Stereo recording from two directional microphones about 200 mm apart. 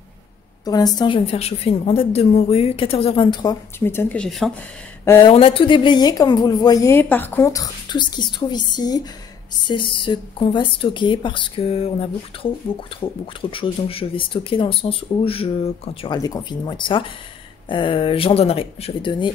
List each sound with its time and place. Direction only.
0.7 s speech: 20° left (ahead or behind); by 4.5 s 5° left (ahead or behind)
5.2 s speech: 25° left (ahead or behind)